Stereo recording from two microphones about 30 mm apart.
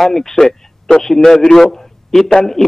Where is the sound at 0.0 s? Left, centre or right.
Centre.